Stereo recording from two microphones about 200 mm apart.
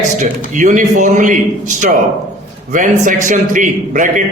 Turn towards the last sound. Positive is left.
turn(degrees=-40)  # may be behind; listen again after turning